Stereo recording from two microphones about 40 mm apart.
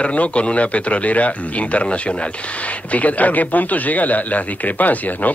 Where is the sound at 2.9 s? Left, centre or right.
Left.